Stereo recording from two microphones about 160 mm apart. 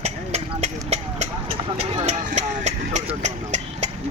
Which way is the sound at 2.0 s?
45° right (ahead or behind).